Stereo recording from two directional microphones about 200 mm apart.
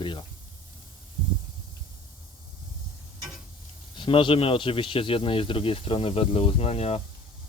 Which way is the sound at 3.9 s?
25° left (ahead or behind).